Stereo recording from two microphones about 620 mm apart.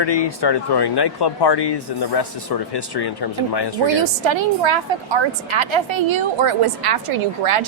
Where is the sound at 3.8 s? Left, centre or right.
Right.